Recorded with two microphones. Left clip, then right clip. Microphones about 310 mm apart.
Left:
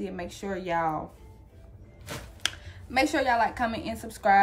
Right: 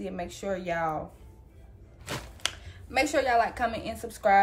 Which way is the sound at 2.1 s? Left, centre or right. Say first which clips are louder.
Right 3 dB; right.